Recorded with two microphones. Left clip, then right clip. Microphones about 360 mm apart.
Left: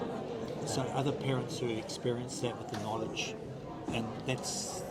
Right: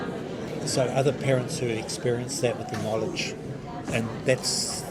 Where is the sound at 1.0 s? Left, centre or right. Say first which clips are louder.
Right 10 dB; right.